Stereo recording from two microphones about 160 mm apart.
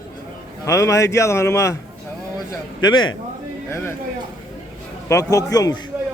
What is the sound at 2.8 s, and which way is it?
Speech, 25° left (ahead or behind).